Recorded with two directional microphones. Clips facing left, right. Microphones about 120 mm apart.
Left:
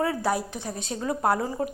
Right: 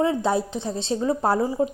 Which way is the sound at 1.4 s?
15° right (ahead or behind).